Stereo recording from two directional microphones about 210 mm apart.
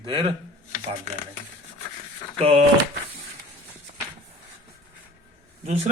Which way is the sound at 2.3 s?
30° right (ahead or behind).